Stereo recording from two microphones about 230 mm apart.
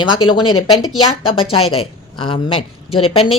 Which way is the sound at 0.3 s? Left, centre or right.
Left.